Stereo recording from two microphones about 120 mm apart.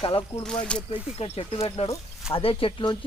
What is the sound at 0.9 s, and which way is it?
Speech, 55° left (ahead or behind).